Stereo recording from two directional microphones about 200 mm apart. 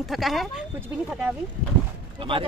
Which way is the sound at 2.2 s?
25° right (ahead or behind).